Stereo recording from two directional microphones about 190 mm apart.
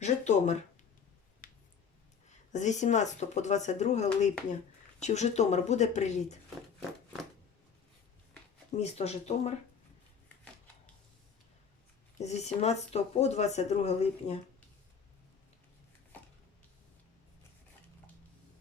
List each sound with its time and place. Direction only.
0.0 s speech: 35° left (ahead or behind)
2.5 s speech: 40° left (ahead or behind)
8.7 s speech: 35° left (ahead or behind)
12.2 s speech: 35° left (ahead or behind)